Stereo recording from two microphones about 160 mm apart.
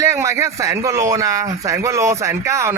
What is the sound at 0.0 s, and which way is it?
Speech, 20° right (ahead or behind).